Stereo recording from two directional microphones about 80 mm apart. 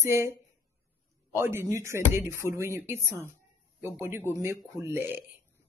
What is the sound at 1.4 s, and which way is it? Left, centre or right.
A woman's voice, right.